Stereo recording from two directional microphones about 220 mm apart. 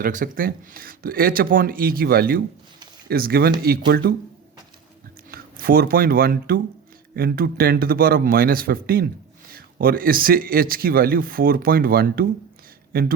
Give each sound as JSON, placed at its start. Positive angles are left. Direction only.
{"t": 0.0, "sound": "speech", "side_deg": -35}
{"t": 5.3, "sound": "speech", "side_deg": -40}